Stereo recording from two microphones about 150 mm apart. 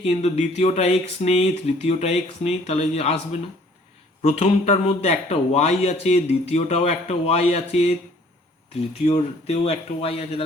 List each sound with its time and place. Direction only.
0.0 s a man's voice: 45° left (ahead or behind)
4.2 s a man's voice: 50° left (ahead or behind)
9.5 s speech: 45° left (ahead or behind)